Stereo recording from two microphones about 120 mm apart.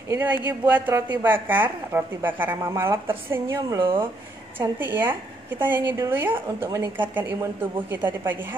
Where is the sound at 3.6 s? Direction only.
35° right (ahead or behind).